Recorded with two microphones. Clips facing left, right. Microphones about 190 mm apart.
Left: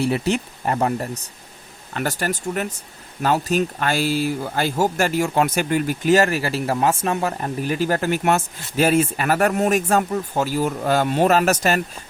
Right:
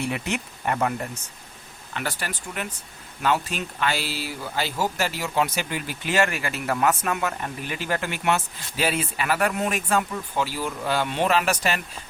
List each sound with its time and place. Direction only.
0.0 s speech: 35° left (ahead or behind)